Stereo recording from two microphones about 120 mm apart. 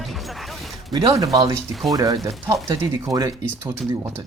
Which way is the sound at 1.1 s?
30° right (ahead or behind).